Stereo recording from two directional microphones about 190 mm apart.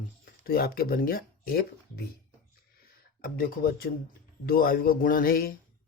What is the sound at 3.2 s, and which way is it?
Speech, 50° left (ahead or behind).